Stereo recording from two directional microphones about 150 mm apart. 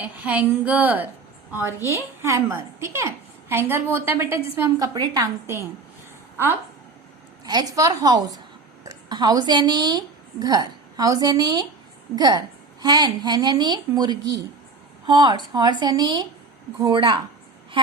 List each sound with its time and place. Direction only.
0.0 s a woman's voice: 10° right (ahead or behind)
7.4 s a woman's voice: 25° right (ahead or behind)